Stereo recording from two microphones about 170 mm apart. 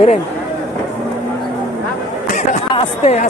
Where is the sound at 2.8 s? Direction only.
40° left (ahead or behind).